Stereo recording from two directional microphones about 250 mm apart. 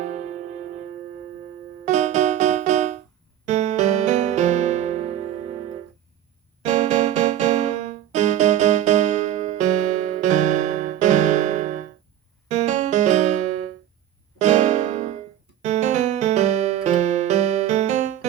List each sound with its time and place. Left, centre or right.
0.0 s music: right
1.8 s music: right
6.6 s keyboard: right
15.6 s music: right